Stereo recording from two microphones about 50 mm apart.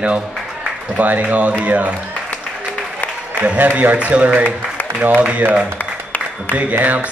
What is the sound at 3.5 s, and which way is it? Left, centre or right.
Speech, right.